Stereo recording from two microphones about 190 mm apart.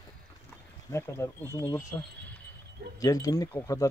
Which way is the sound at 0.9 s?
15° left (ahead or behind).